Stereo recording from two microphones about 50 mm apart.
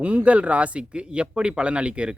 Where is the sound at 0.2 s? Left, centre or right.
Right.